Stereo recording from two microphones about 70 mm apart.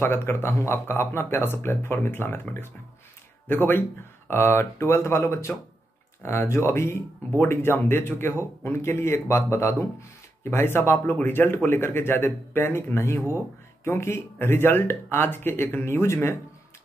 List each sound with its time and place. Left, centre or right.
0.0 s speech: left
3.4 s speech: left